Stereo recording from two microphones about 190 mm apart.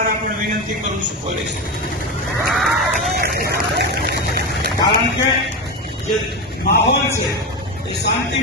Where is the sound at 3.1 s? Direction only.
55° right (ahead or behind).